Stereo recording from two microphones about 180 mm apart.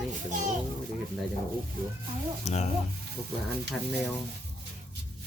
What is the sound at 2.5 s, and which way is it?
Speech, 35° left (ahead or behind).